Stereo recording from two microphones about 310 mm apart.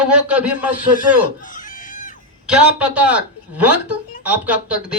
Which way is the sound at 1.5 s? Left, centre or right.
Left.